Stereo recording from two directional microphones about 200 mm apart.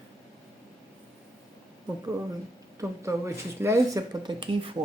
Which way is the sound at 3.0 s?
15° right (ahead or behind).